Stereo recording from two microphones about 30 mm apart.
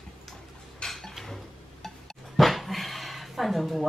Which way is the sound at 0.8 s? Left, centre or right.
Centre.